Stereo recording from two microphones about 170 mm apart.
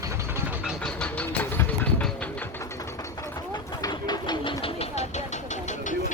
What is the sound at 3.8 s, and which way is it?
Train, 25° left (ahead or behind).